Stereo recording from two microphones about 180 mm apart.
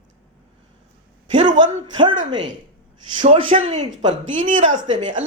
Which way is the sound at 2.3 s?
25° right (ahead or behind).